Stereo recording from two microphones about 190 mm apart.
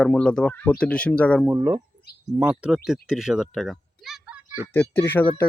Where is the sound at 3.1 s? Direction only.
Centre (ahead or behind).